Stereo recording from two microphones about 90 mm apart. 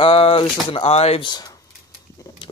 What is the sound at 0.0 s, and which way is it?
Speech, 85° left.